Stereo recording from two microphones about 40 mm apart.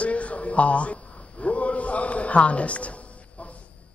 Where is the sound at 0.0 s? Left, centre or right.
Left.